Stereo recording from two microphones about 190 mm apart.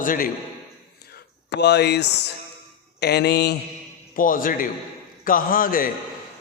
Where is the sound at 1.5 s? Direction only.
65° left (ahead or behind).